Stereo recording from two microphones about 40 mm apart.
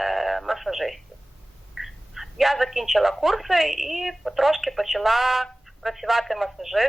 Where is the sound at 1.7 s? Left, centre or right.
Centre.